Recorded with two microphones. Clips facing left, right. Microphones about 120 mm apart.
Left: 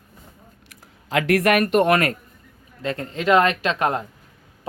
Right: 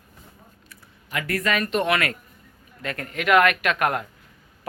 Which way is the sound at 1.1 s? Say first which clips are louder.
Left 7 dB; 90° left.